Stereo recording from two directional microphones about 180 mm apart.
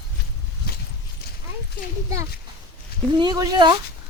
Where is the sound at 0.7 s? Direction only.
60° left (ahead or behind).